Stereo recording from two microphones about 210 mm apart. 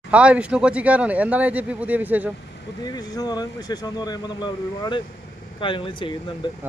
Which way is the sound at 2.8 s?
20° left (ahead or behind).